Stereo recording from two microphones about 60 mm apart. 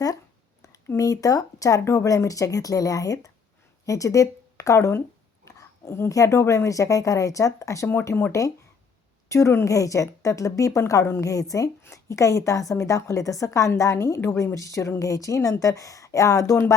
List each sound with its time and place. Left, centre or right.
0.9 s speech: left
1.8 s a woman's voice: left
5.8 s speech: left
6.1 s a woman's voice: left
9.3 s a woman's voice: left
10.8 s a woman's voice: left
11.2 s speech: left
11.8 s a woman's voice: left